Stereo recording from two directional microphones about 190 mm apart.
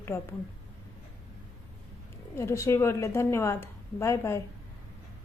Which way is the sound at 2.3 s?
15° left (ahead or behind).